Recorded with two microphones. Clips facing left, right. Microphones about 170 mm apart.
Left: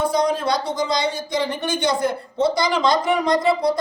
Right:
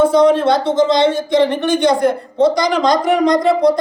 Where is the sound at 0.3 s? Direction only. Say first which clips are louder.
Right 9 dB; 60° right (ahead or behind).